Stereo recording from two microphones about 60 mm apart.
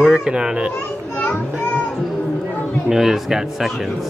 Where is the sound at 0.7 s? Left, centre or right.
Left.